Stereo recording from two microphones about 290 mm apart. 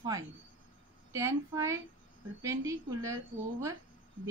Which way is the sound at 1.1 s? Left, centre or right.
Centre.